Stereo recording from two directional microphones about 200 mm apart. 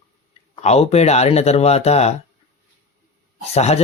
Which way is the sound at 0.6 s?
30° left (ahead or behind).